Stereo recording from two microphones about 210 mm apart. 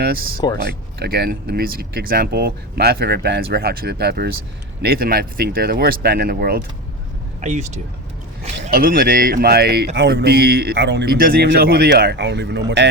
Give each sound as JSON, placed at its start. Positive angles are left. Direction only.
{"t": 0.6, "sound": "speech", "side_deg": -50}
{"t": 8.6, "sound": "speech", "side_deg": -40}